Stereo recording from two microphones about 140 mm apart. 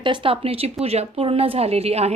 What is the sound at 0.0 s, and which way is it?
A woman's voice, 35° right (ahead or behind).